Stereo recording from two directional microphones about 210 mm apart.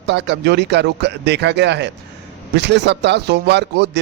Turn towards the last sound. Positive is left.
turn(degrees=-55)  # may be behind; listen again after turning